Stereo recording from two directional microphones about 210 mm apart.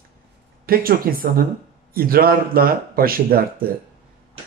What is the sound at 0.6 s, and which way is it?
Speech, 45° right (ahead or behind).